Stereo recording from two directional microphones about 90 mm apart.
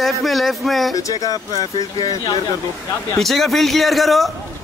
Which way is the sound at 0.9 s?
40° left (ahead or behind).